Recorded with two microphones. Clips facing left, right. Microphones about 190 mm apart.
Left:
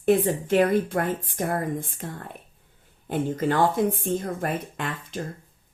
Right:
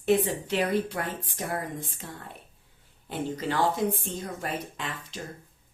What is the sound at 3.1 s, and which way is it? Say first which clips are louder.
A woman's voice: left 6 dB; 50° left (ahead or behind).